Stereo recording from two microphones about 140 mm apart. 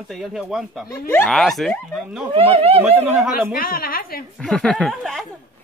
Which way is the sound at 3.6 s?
90° left.